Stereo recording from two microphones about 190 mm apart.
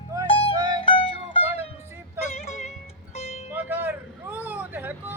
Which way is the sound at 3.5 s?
10° right (ahead or behind).